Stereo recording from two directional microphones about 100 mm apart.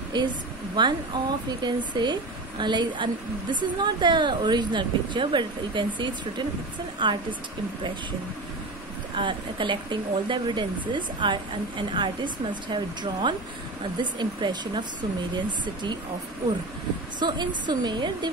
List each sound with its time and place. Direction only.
0.1 s speech: 45° right (ahead or behind)
9.1 s speech: 55° right (ahead or behind)
17.2 s speech: 50° right (ahead or behind)